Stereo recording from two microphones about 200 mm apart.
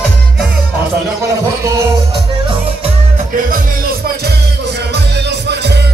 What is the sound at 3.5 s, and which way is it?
Music, 50° right (ahead or behind).